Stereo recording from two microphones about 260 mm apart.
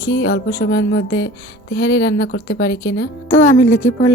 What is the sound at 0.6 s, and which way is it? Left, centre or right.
A woman's voice, left.